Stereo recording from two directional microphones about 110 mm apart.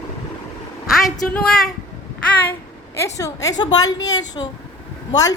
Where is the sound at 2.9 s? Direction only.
30° left (ahead or behind).